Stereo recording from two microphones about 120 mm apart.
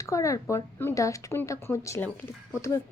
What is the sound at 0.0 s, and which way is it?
A woman's voice, 25° left (ahead or behind).